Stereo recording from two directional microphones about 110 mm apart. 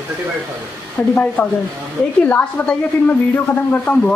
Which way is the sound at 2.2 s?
15° left (ahead or behind).